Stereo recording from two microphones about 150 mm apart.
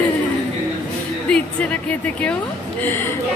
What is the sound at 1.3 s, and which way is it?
A woman's voice, 10° left (ahead or behind).